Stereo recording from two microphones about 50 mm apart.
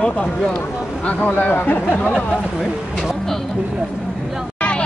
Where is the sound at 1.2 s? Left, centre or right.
Left.